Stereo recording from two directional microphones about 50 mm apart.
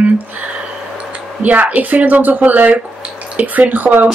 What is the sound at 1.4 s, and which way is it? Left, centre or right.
Speech, right.